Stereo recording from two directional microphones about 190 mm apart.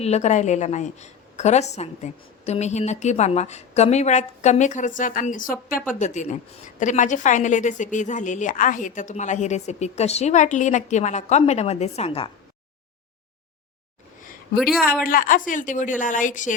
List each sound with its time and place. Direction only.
0.0 s a woman's voice: 35° left (ahead or behind)
14.6 s a woman's voice: centre (ahead or behind)
15.0 s speech: 45° left (ahead or behind)